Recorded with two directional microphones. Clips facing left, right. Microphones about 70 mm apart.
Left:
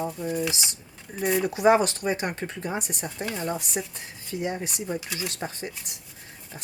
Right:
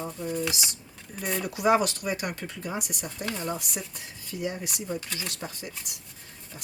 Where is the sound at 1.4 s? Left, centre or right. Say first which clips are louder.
Left 3 dB; left.